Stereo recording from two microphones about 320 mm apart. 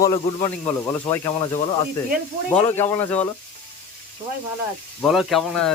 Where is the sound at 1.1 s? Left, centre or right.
Centre.